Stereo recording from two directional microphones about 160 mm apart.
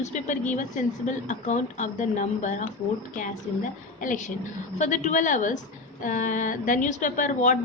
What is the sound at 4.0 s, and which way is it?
A woman's voice, 55° left (ahead or behind).